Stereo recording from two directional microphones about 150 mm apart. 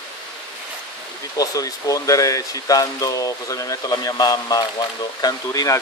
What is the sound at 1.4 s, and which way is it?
Speech, 25° left (ahead or behind).